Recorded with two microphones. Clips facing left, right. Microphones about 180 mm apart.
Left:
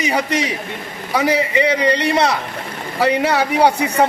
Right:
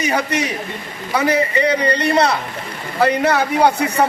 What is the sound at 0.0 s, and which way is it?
A man's voice, 15° left (ahead or behind).